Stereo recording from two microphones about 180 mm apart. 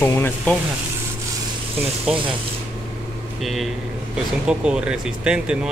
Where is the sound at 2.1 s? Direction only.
5° right (ahead or behind).